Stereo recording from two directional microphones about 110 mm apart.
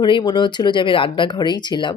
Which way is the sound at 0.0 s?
45° left (ahead or behind).